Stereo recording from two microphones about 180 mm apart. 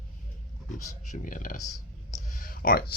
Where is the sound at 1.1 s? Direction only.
45° left (ahead or behind).